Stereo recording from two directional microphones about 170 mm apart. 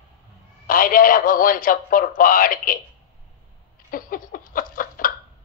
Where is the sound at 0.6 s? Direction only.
55° left (ahead or behind).